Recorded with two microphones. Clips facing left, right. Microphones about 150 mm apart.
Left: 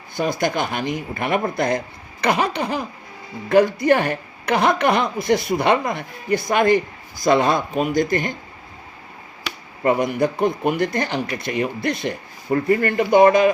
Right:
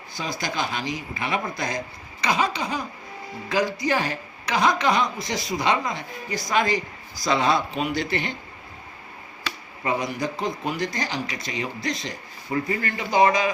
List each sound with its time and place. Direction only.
0.2 s speech: 55° left (ahead or behind)
9.8 s speech: 55° left (ahead or behind)